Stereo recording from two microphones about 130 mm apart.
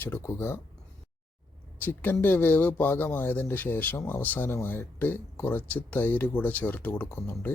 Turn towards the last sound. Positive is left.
turn(degrees=20)  # may be behind; listen again after turning